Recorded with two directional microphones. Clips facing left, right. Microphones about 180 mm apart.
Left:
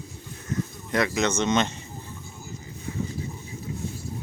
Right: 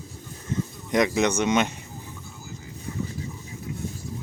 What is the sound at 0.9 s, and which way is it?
Speech, 15° right (ahead or behind).